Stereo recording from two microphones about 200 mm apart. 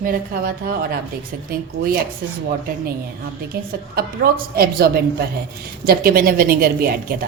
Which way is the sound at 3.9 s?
50° right (ahead or behind).